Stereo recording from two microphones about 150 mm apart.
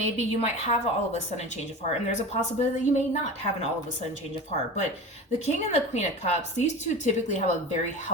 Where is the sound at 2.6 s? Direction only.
50° left (ahead or behind).